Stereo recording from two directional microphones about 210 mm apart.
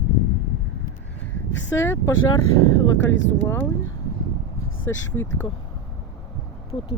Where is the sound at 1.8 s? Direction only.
10° left (ahead or behind).